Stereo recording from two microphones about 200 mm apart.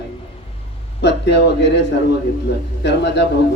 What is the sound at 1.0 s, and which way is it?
A man's voice, 60° left (ahead or behind).